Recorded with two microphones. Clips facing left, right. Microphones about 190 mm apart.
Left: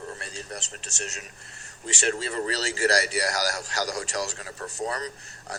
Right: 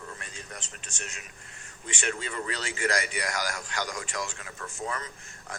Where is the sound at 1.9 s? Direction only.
35° left (ahead or behind).